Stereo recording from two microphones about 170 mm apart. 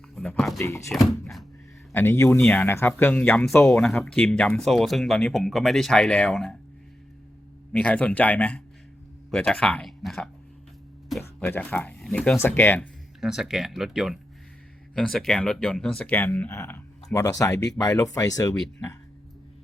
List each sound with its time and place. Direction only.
0.2 s speech: 5° left (ahead or behind)
1.9 s speech: 15° left (ahead or behind)
3.8 s speech: 5° left (ahead or behind)
7.7 s speech: 5° left (ahead or behind)
13.1 s speech: 5° right (ahead or behind); by 18.5 s 20° left (ahead or behind)